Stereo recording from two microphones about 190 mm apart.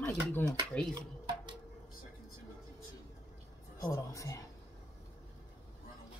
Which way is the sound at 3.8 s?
15° left (ahead or behind).